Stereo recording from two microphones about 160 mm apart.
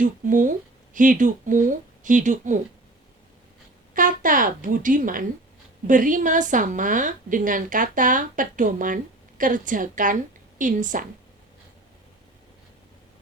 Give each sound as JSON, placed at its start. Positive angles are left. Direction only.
{"t": 0.0, "sound": "a woman's voice", "side_deg": -55}
{"t": 3.9, "sound": "a woman's voice", "side_deg": -55}